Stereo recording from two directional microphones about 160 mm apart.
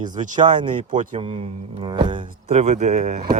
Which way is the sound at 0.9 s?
50° right (ahead or behind).